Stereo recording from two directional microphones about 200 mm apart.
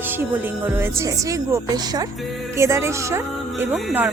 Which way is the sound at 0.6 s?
10° right (ahead or behind).